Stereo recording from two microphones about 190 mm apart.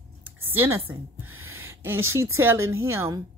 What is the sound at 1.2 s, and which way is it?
Gasp, 90° right.